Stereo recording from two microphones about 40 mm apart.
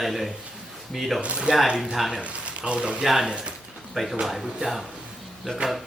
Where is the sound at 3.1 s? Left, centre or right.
Centre.